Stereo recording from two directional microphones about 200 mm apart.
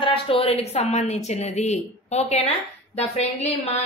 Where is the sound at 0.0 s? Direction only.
25° left (ahead or behind).